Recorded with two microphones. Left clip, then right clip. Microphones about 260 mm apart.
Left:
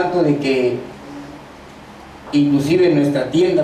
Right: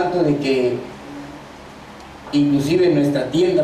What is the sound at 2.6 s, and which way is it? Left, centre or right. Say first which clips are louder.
A man's voice: left 2 dB; centre.